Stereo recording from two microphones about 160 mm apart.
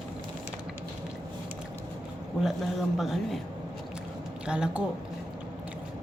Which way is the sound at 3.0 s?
Centre (ahead or behind).